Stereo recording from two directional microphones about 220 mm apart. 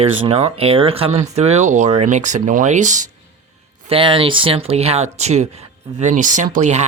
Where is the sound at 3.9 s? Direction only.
25° right (ahead or behind).